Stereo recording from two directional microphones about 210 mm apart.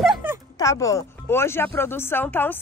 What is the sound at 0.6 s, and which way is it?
Speech, 15° left (ahead or behind).